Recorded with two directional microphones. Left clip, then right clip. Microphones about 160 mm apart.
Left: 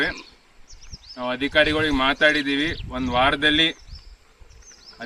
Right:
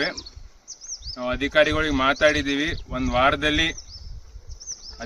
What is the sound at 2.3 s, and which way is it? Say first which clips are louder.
Speech: left 1 dB; 45° right (ahead or behind).